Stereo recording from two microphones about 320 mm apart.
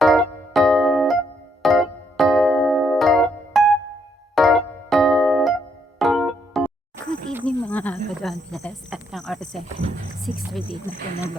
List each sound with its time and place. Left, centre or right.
0.0 s music: centre
7.3 s speech: centre